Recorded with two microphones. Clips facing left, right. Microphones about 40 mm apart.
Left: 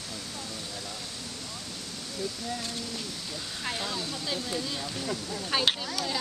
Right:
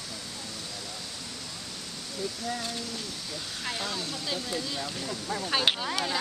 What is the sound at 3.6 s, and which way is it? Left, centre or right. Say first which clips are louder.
Speech: even; centre.